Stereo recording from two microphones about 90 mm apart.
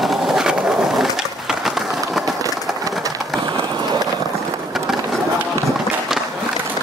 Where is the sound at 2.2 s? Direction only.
40° right (ahead or behind).